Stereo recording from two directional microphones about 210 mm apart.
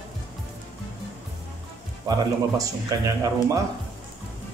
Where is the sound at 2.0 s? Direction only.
15° right (ahead or behind).